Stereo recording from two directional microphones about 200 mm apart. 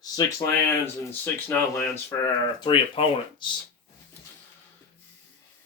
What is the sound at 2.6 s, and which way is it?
Speech, 25° left (ahead or behind).